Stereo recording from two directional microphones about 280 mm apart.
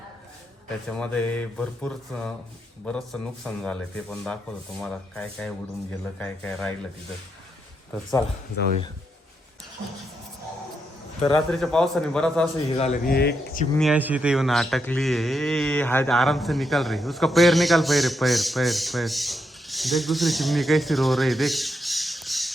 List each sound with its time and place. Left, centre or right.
0.9 s a man's voice: centre
11.3 s a man's voice: centre
12.7 s speech: left
13.7 s a man's voice: centre